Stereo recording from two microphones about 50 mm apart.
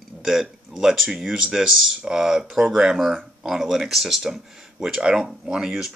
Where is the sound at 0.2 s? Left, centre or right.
Centre.